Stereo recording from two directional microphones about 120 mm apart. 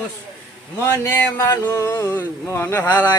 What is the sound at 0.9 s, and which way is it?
Speech, 15° left (ahead or behind).